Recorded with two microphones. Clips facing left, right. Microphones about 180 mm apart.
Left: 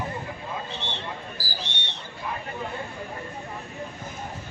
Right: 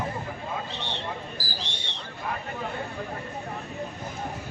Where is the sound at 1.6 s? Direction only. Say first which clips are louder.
Left 1 dB; 35° right (ahead or behind).